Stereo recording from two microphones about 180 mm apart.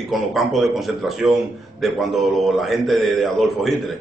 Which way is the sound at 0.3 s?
Centre (ahead or behind).